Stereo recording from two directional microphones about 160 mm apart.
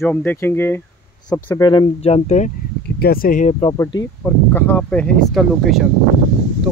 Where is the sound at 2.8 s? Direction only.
75° left (ahead or behind); by 3.5 s 60° left (ahead or behind).